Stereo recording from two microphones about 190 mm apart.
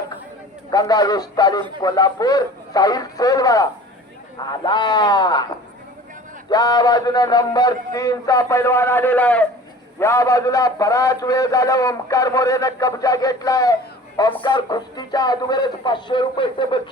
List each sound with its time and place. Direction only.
0.7 s a man's voice: 20° left (ahead or behind)
6.5 s a man's voice: 20° left (ahead or behind)